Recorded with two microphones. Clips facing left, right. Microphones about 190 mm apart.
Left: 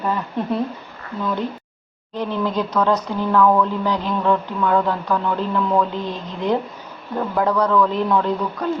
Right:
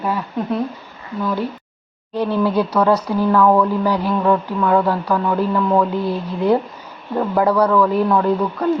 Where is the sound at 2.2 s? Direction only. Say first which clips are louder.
Right 5 dB; 10° right (ahead or behind).